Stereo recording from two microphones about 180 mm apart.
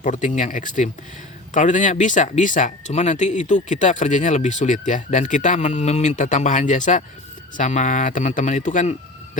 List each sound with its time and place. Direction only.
0.0 s speech: 45° left (ahead or behind)